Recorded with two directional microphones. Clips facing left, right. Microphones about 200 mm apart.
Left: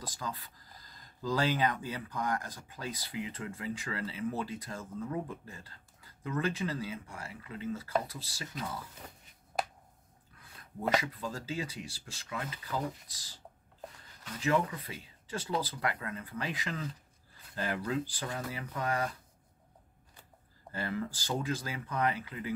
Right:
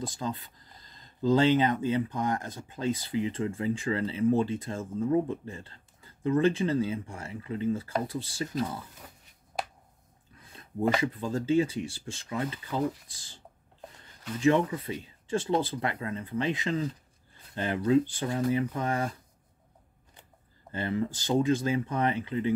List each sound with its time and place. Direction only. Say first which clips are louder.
0.0 s speech: right 7 dB; 25° right (ahead or behind)
10.4 s speech: right 7 dB; 25° right (ahead or behind)
14.4 s speech: right 6 dB; 25° right (ahead or behind)
20.7 s speech: right 6 dB; 25° right (ahead or behind)